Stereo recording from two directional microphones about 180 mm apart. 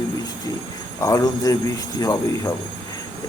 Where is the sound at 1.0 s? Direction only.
20° left (ahead or behind).